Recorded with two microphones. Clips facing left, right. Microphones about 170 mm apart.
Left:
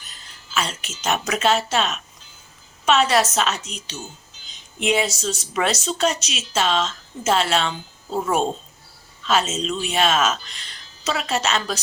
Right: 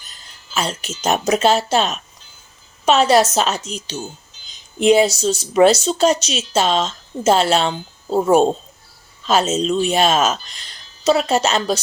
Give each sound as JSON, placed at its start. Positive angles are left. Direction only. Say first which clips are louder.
{"t": 0.5, "sound": "speech", "louder": "right 3 dB", "side_deg": -35}